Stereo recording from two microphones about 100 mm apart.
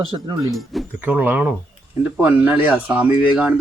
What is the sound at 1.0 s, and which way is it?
Speech, 20° right (ahead or behind).